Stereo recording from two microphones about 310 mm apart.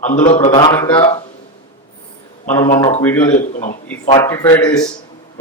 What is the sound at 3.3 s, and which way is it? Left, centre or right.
Speech, left.